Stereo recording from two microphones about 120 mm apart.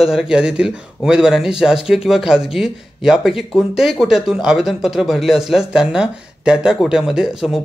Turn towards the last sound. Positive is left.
turn(degrees=-5)  # may be behind; listen again after turning